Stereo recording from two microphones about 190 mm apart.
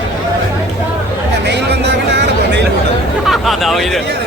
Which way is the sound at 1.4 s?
65° right (ahead or behind).